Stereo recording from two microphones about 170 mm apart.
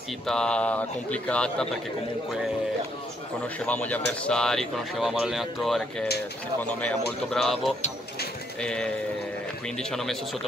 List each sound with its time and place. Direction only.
0.3 s speech: 5° left (ahead or behind)
3.5 s speech: 10° left (ahead or behind)